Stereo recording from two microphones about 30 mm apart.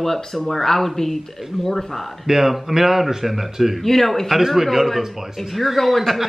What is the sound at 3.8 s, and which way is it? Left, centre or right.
Speech, centre.